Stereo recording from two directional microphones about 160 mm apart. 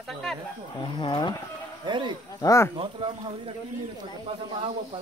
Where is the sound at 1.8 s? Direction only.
30° right (ahead or behind).